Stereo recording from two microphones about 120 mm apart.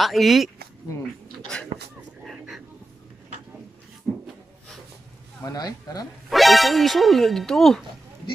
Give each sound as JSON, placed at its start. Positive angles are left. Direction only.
{"t": 0.0, "sound": "speech", "side_deg": 0}
{"t": 1.5, "sound": "speech", "side_deg": 5}
{"t": 2.2, "sound": "a sound", "side_deg": 0}
{"t": 4.1, "sound": "a sound", "side_deg": 5}
{"t": 5.4, "sound": "speech", "side_deg": 30}
{"t": 6.3, "sound": "speech", "side_deg": 0}